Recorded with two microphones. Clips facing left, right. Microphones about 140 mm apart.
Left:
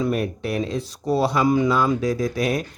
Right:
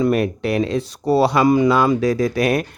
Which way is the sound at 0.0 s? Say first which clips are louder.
Right 5 dB; 75° right (ahead or behind).